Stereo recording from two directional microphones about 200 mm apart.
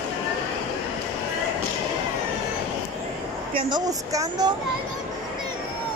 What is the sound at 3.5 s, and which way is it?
A woman's voice, 20° right (ahead or behind).